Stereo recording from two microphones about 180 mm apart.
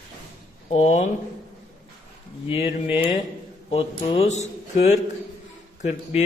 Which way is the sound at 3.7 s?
35° left (ahead or behind).